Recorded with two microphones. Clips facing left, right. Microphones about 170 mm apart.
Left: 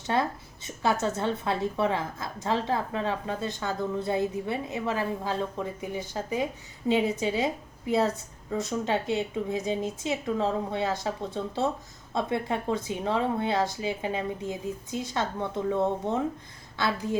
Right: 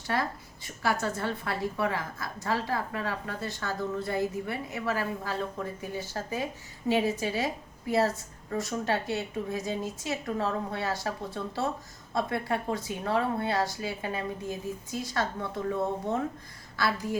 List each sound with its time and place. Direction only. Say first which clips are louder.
0.1 s a woman's voice: left 3 dB; 25° left (ahead or behind)